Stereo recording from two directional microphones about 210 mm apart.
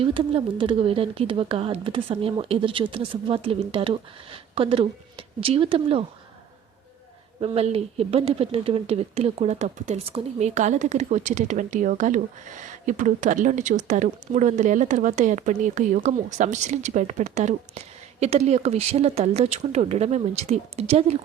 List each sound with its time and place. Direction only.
0.0 s speech: 25° right (ahead or behind)
7.4 s speech: 30° right (ahead or behind)